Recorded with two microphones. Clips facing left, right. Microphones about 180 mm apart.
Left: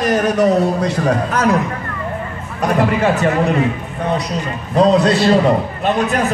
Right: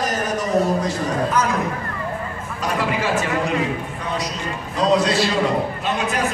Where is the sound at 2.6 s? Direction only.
60° left (ahead or behind).